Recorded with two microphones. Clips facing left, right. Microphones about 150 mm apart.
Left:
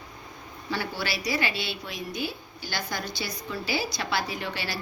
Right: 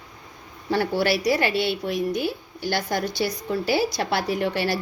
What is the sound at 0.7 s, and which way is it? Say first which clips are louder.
A woman's voice: right 10 dB; 60° right (ahead or behind).